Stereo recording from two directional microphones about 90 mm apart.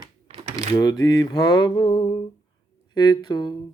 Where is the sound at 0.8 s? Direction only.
45° left (ahead or behind).